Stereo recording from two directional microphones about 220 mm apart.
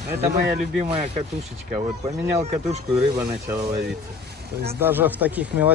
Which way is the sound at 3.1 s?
15° right (ahead or behind).